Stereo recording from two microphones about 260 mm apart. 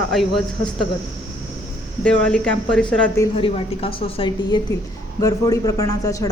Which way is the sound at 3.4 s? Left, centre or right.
Left.